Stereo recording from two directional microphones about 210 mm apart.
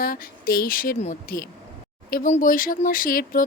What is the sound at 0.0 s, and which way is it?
Speech, 45° left (ahead or behind).